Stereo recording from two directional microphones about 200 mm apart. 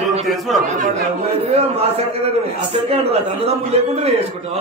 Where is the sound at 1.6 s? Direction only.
30° right (ahead or behind).